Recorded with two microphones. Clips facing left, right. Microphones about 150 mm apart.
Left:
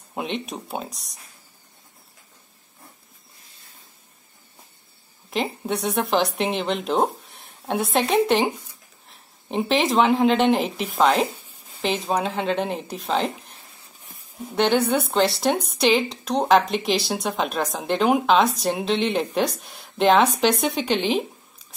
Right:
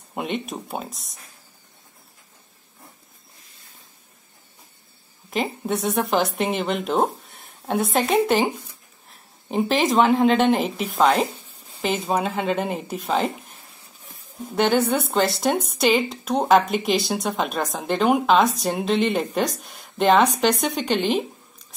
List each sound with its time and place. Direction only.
0.1 s speech: centre (ahead or behind)
5.3 s speech: centre (ahead or behind)